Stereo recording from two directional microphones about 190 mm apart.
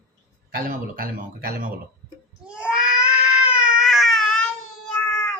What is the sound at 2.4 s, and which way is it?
Cat, 5° right (ahead or behind).